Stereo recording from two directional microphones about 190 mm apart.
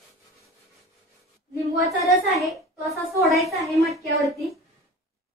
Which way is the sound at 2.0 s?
Centre (ahead or behind).